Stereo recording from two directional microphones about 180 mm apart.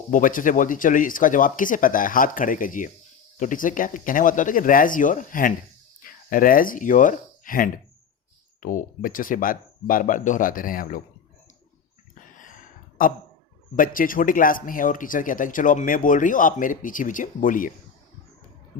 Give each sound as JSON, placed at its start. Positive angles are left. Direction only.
{"t": 0.1, "sound": "speech", "side_deg": 50}
{"t": 13.0, "sound": "speech", "side_deg": 50}